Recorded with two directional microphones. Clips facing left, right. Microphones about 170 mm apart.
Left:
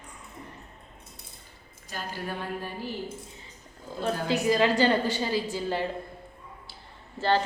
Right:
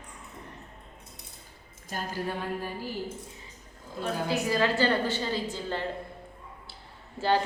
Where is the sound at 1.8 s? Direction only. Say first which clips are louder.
Right 2 dB; 45° right (ahead or behind).